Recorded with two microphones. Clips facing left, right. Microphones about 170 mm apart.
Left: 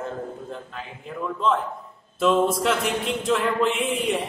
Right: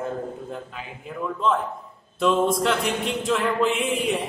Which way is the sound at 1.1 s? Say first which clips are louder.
Even; 5° right (ahead or behind).